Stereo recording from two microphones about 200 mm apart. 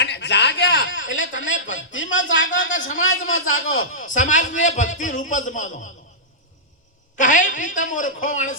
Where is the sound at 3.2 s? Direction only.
90° left.